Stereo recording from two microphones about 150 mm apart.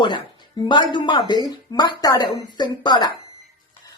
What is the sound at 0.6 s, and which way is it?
Speech, 30° left (ahead or behind).